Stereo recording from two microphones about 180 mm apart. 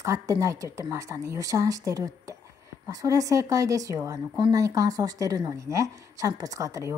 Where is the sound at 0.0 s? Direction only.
20° right (ahead or behind).